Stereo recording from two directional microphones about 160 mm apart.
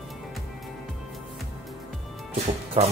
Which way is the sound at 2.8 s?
40° right (ahead or behind).